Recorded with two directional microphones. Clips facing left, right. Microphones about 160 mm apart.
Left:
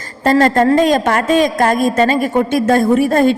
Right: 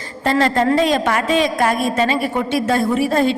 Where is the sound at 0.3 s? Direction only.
45° left (ahead or behind).